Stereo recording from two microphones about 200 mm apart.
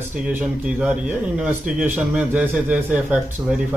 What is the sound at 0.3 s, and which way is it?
Speech, 5° right (ahead or behind).